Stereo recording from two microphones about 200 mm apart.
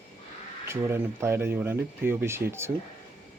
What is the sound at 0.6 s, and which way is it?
Speech, 10° right (ahead or behind).